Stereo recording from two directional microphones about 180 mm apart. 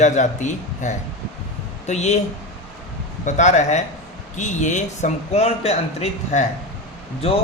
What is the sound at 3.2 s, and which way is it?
Speech, 40° left (ahead or behind).